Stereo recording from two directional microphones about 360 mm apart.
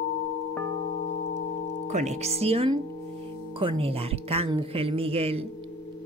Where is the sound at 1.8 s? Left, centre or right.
Centre.